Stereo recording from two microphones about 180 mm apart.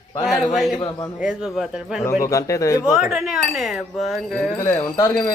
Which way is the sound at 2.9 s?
Centre (ahead or behind).